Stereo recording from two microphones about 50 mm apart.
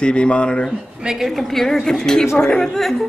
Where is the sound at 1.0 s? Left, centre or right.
Centre.